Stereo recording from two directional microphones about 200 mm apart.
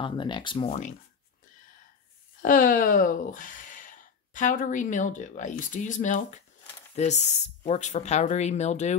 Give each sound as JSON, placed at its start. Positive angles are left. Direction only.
{"t": 0.0, "sound": "speech", "side_deg": 25}
{"t": 2.4, "sound": "speech", "side_deg": 45}